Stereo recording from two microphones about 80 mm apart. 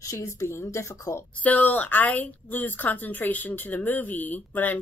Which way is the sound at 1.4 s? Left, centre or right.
Left.